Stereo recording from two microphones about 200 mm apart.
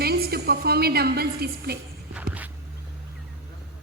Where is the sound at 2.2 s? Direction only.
5° right (ahead or behind).